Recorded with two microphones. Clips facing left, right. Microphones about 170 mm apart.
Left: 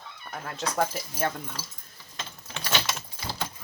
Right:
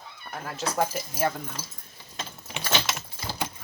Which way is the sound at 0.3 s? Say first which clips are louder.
Right 1 dB; 5° right (ahead or behind).